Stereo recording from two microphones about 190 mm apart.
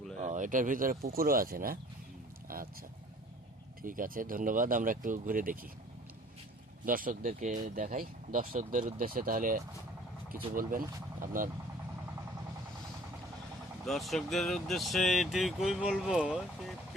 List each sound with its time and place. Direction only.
0.2 s speech: 40° right (ahead or behind)
2.5 s vehicle: 50° right (ahead or behind)
3.8 s speech: 45° right (ahead or behind)
6.8 s speech: 45° right (ahead or behind)
13.8 s speech: centre (ahead or behind)